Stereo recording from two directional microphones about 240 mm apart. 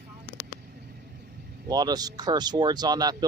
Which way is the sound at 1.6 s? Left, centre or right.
Centre.